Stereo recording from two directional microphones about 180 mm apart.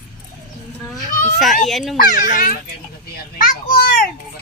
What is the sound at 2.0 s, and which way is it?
A child's voice, 50° left (ahead or behind).